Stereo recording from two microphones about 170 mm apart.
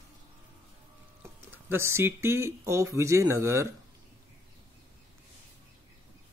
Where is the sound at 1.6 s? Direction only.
15° right (ahead or behind).